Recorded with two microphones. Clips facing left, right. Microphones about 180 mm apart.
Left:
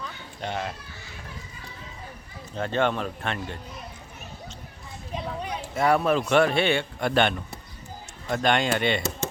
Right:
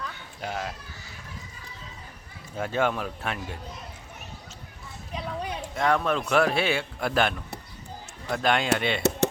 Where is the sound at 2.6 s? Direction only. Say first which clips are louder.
Left 1 dB; 5° right (ahead or behind).